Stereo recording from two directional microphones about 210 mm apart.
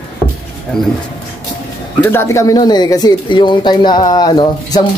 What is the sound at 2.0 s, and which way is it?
Speech, 10° left (ahead or behind).